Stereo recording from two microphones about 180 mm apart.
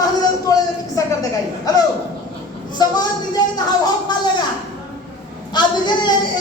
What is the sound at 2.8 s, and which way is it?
Speech, 20° left (ahead or behind).